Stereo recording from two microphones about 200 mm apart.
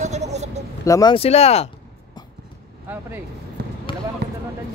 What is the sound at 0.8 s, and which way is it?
Speech, 20° left (ahead or behind).